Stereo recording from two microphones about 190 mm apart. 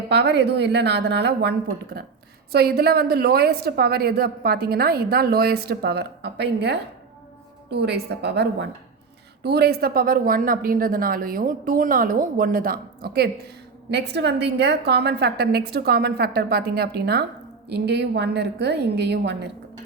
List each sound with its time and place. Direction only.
0.1 s a woman's voice: 65° right (ahead or behind)